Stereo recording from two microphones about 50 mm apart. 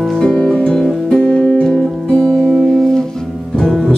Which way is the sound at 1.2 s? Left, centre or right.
Centre.